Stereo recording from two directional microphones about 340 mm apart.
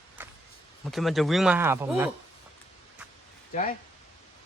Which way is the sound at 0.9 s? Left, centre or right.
Centre.